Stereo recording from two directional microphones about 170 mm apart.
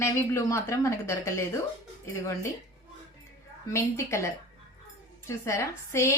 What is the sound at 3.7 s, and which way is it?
A woman's voice, 15° left (ahead or behind).